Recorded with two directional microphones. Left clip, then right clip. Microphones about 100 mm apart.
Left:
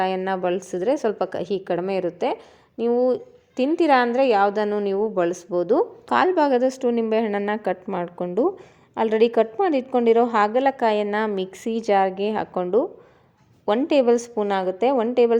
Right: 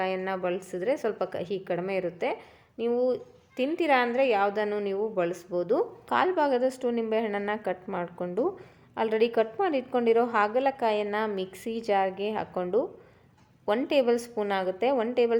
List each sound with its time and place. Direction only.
0.0 s a woman's voice: 50° left (ahead or behind); by 15.4 s 30° left (ahead or behind)